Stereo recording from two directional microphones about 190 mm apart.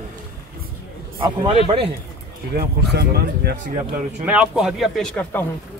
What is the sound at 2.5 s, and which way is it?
Speech, 60° right (ahead or behind).